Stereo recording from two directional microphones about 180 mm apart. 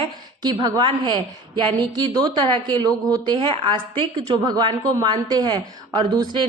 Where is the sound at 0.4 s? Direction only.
20° right (ahead or behind).